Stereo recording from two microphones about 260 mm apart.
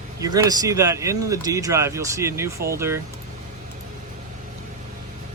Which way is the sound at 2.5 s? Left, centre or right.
Right.